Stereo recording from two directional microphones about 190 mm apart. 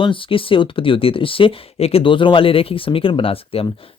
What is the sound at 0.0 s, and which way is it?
Speech, 25° left (ahead or behind).